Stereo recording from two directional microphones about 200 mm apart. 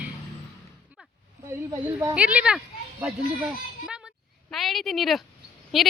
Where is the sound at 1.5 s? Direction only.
15° right (ahead or behind).